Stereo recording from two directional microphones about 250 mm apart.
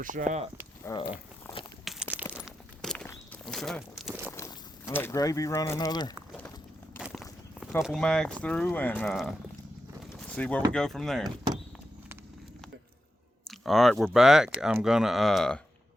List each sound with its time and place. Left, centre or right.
0.0 s speech: right
0.9 s speech: centre
1.8 s a sound: centre
2.4 s walk: centre
4.3 s speech: centre
7.0 s a sound: centre
7.8 s speech: centre
10.2 s a sound: centre
10.7 s speech: centre
13.5 s speech: centre